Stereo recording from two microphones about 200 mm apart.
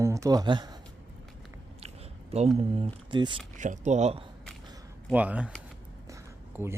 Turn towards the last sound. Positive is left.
turn(degrees=-10)  # may be behind; listen again after turning